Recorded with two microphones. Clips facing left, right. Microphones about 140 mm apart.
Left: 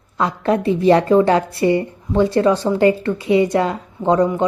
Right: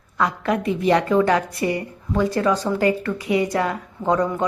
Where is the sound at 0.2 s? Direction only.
30° left (ahead or behind).